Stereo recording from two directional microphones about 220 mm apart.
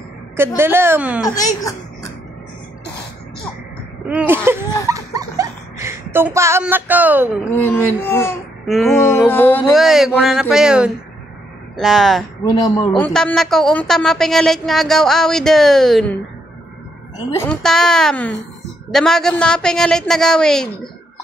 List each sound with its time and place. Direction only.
0.6 s a woman's voice: 10° right (ahead or behind)
1.2 s speech: 15° left (ahead or behind)
4.1 s a woman's voice: 5° right (ahead or behind)
4.8 s dog: 15° right (ahead or behind)
7.5 s speech: 10° left (ahead or behind)
8.6 s a sound: centre (ahead or behind)
8.9 s a woman's voice: 15° left (ahead or behind)
12.4 s speech: 15° left (ahead or behind)
13.1 s a woman's voice: 5° left (ahead or behind)
17.3 s a woman's voice: 10° left (ahead or behind)